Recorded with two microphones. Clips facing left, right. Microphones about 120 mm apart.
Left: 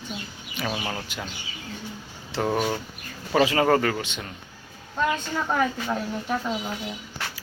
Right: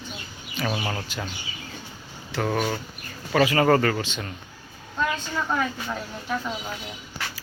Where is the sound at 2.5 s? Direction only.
10° left (ahead or behind).